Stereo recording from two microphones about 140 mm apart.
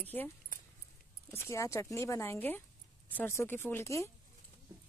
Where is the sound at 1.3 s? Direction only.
20° left (ahead or behind).